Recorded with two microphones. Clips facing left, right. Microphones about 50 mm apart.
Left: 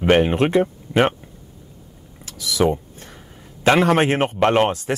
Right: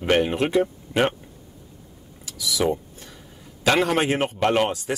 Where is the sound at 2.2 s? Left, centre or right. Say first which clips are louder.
Left 4 dB; left.